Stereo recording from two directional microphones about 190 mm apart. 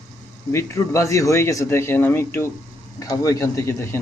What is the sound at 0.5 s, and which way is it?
Speech, 15° left (ahead or behind).